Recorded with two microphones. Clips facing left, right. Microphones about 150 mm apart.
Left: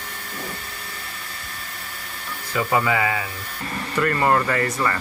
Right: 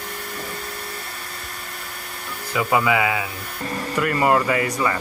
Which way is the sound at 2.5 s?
10° right (ahead or behind).